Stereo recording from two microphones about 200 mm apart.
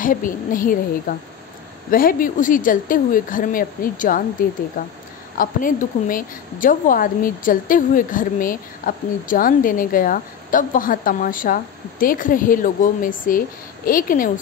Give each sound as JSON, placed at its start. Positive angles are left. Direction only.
{"t": 0.0, "sound": "a woman's voice", "side_deg": 40}